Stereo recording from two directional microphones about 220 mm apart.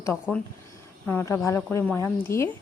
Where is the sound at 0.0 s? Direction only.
10° left (ahead or behind).